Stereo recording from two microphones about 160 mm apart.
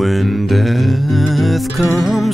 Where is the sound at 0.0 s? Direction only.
Centre (ahead or behind).